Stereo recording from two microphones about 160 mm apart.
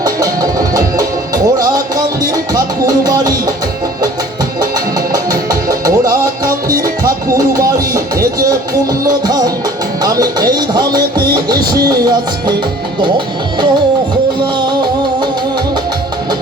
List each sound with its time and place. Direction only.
0.0 s music: 20° right (ahead or behind)
5.1 s music: 20° right (ahead or behind)